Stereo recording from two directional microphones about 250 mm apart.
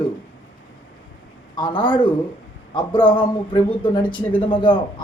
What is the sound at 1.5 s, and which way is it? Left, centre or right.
A man's voice, centre.